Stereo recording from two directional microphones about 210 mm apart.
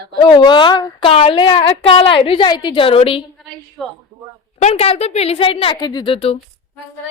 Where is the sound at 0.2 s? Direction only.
20° left (ahead or behind).